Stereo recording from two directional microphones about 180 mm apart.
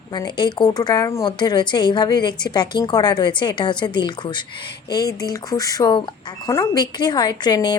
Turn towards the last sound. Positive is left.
turn(degrees=25)  # may be behind; listen again after turning